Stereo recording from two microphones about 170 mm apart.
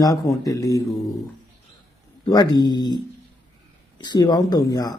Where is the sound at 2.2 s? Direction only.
25° left (ahead or behind).